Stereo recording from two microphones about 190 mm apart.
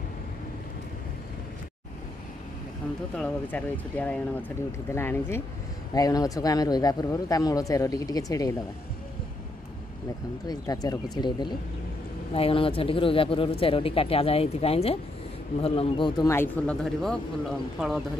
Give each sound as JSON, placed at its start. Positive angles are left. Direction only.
{"t": 3.2, "sound": "speech", "side_deg": 10}
{"t": 10.4, "sound": "speech", "side_deg": 20}
{"t": 16.3, "sound": "speech", "side_deg": 10}